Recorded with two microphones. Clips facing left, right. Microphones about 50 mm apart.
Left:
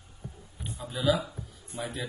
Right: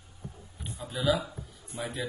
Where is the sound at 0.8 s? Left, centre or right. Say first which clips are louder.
Left 1 dB; centre.